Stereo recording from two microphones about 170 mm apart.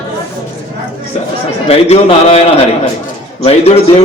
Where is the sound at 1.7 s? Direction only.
40° left (ahead or behind).